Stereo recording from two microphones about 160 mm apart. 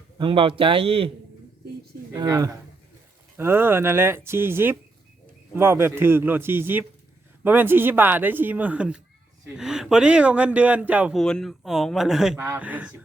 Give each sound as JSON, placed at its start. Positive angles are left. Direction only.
{"t": 0.2, "sound": "a man's voice", "side_deg": -35}
{"t": 2.1, "sound": "speech", "side_deg": -20}
{"t": 11.2, "sound": "speech", "side_deg": 5}